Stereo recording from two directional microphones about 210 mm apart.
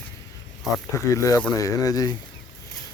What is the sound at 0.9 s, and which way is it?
Speech, 15° left (ahead or behind).